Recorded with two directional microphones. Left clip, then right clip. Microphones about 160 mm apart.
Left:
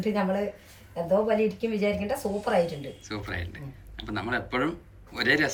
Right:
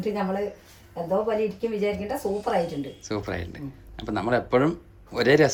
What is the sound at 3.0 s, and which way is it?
Speech, 35° right (ahead or behind).